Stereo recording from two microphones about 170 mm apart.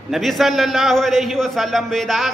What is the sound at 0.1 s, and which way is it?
A man's voice, centre (ahead or behind).